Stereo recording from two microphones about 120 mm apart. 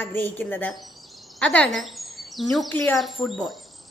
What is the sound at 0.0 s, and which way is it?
Speech, 15° left (ahead or behind).